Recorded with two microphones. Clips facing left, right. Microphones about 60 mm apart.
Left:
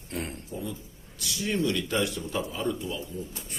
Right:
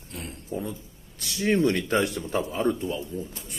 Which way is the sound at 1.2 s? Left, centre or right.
Right.